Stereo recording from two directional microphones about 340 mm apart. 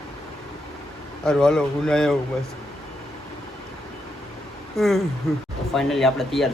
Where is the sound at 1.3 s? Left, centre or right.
Centre.